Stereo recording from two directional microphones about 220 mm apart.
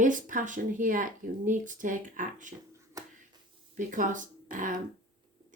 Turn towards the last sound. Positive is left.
turn(degrees=-35)  # may be behind; listen again after turning